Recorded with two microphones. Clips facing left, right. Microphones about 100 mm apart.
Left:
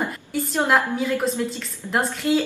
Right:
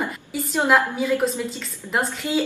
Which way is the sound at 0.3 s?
Centre (ahead or behind).